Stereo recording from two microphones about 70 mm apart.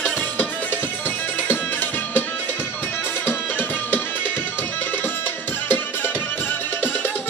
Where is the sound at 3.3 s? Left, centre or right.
Left.